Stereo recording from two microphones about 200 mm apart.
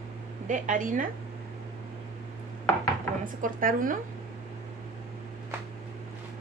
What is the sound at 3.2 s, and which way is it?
Speech, 45° right (ahead or behind).